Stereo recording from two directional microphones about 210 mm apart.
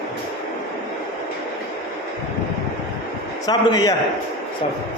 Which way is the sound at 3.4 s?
20° left (ahead or behind).